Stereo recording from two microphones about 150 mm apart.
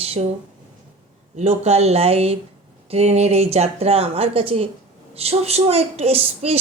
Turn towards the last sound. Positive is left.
turn(degrees=-40)  # may be behind; listen again after turning